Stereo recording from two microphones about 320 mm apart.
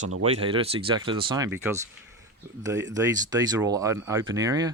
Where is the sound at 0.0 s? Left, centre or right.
Right.